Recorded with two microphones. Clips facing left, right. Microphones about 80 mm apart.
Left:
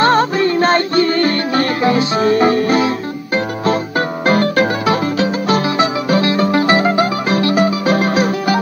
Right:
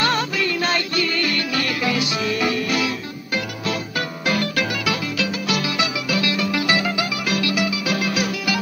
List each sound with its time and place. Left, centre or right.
0.0 s music: left
4.3 s music: left